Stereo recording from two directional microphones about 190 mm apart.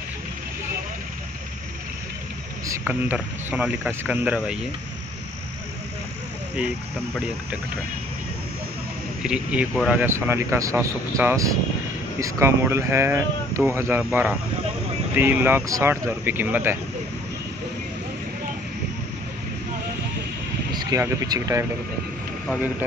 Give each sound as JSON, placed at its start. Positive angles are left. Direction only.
{"t": 2.9, "sound": "speech", "side_deg": -10}
{"t": 9.2, "sound": "speech", "side_deg": -5}
{"t": 20.7, "sound": "speech", "side_deg": -20}